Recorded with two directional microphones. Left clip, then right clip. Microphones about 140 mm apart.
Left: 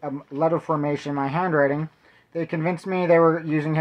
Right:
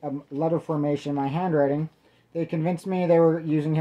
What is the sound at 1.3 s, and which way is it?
Speech, 30° right (ahead or behind).